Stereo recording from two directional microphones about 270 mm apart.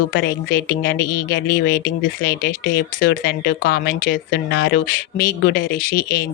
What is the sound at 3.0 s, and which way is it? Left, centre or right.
Speech, left.